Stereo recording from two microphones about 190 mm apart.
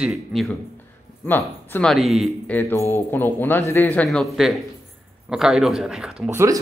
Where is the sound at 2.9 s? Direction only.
10° left (ahead or behind).